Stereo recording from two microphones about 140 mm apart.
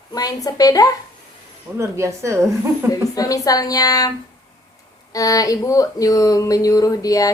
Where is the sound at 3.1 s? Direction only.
25° left (ahead or behind).